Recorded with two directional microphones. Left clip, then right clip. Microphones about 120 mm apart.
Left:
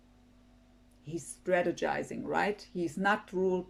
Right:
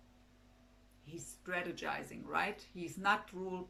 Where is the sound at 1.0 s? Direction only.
60° left (ahead or behind).